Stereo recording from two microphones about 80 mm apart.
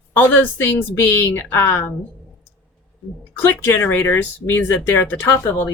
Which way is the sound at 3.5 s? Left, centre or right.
Left.